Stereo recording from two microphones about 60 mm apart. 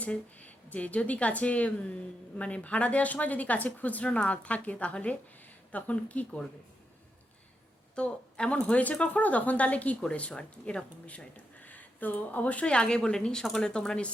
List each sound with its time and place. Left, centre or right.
0.0 s a woman's voice: left
7.9 s a woman's voice: centre